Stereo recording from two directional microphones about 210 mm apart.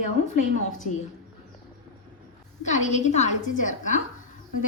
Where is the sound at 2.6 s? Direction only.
35° left (ahead or behind).